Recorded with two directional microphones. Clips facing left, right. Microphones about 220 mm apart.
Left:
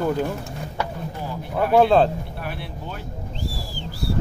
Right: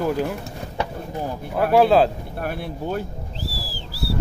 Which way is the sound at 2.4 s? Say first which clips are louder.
Right 5 dB; 45° right (ahead or behind).